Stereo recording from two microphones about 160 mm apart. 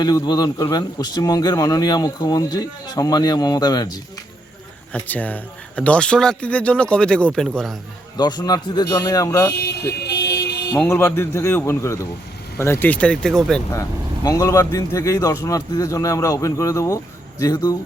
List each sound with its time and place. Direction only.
0.0 s a man's voice: 25° left (ahead or behind)
4.9 s speech: 10° left (ahead or behind)
8.1 s a man's voice: 25° left (ahead or behind)
10.0 s vehicle: 90° left
10.8 s speech: 15° left (ahead or behind)
14.3 s a man's voice: 20° left (ahead or behind)